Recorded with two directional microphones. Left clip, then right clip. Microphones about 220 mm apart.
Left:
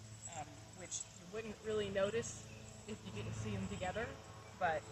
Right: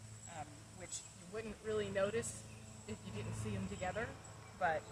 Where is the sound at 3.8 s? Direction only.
Centre (ahead or behind).